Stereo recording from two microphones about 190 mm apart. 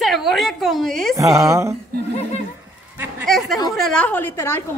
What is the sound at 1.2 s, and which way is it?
Speech, 15° right (ahead or behind).